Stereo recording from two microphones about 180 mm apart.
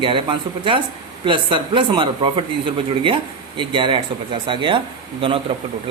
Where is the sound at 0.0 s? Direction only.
30° right (ahead or behind).